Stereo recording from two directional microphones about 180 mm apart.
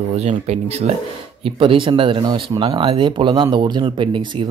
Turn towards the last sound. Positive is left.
turn(degrees=-25)  # may be behind; listen again after turning